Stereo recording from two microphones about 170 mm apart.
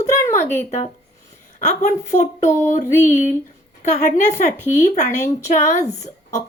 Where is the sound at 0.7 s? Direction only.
40° left (ahead or behind).